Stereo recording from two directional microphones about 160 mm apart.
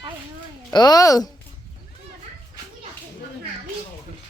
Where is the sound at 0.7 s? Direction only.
25° left (ahead or behind).